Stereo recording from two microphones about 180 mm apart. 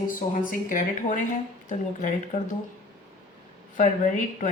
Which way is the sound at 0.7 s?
45° left (ahead or behind).